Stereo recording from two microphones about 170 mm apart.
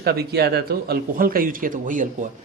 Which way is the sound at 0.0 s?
70° right (ahead or behind).